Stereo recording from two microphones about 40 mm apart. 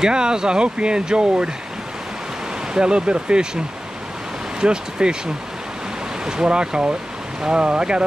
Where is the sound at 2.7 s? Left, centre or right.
Right.